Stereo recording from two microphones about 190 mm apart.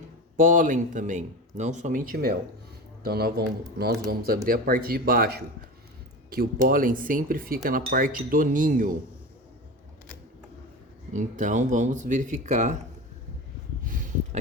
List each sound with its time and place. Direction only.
0.3 s speech: 45° right (ahead or behind)
11.1 s speech: 40° right (ahead or behind)
13.8 s a sound: 45° right (ahead or behind)